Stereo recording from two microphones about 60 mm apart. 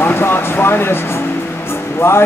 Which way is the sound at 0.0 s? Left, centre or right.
Left.